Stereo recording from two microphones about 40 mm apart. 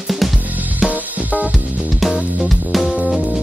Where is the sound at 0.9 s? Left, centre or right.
Right.